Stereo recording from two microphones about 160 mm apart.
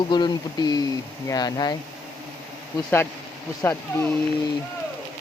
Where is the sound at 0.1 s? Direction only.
25° left (ahead or behind).